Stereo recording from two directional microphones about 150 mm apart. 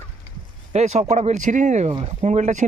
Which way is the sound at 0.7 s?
50° right (ahead or behind).